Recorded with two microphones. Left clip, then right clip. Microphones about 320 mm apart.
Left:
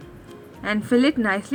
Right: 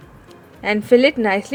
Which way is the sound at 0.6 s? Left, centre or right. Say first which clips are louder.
Right 7 dB; centre.